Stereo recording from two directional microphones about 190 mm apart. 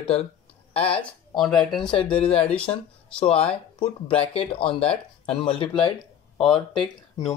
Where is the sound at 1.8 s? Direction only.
25° left (ahead or behind).